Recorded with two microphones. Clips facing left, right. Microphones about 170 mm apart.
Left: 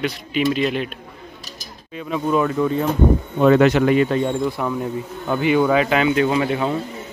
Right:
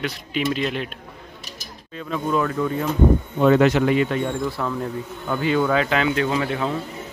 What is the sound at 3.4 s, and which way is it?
Speech, 70° left (ahead or behind).